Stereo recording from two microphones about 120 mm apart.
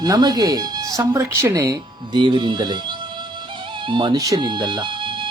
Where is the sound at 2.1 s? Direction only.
40° right (ahead or behind).